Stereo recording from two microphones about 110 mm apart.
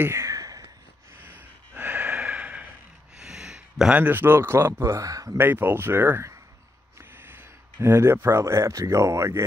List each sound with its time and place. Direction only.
0.0 s a sound: 25° right (ahead or behind)
1.1 s gasp: 20° right (ahead or behind)
3.2 s speech: 5° right (ahead or behind); by 5.4 s 30° right (ahead or behind)
5.4 s speech: 20° right (ahead or behind)
7.0 s a sound: 20° right (ahead or behind)
7.8 s speech: 20° right (ahead or behind)